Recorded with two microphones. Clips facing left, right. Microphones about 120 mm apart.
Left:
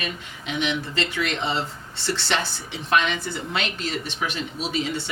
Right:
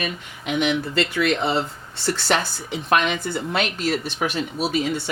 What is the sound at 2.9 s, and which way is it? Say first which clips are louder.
Speech: right 2 dB; 45° right (ahead or behind).